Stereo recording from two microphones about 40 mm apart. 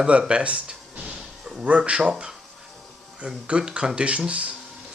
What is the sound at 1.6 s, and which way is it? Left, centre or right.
Speech, right.